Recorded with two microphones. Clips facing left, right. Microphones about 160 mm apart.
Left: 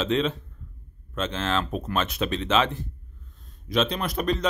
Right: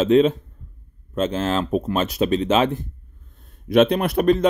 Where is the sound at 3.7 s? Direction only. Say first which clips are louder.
Right 9 dB; 60° right (ahead or behind).